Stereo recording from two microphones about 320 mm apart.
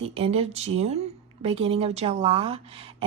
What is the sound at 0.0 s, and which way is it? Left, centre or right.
Speech, centre.